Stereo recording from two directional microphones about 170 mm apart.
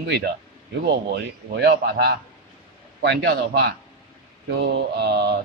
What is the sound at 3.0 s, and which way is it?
Speech, 80° right.